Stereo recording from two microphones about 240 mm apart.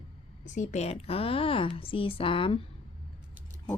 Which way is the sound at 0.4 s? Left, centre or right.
Left.